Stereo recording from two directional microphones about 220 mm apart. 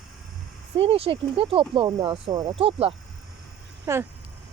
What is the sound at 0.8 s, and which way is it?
Speech, 25° right (ahead or behind).